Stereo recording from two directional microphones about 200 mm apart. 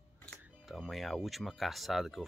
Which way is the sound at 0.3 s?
Centre (ahead or behind).